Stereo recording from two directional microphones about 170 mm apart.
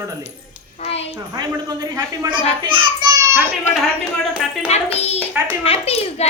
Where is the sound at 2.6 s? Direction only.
25° right (ahead or behind).